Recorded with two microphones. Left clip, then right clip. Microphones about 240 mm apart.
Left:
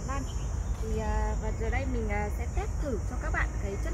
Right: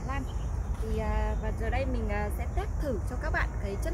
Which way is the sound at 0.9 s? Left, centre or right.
Centre.